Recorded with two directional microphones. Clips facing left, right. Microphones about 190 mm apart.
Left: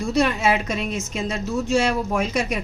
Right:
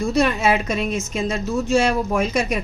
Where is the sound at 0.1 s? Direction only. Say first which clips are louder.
Even; 45° right (ahead or behind).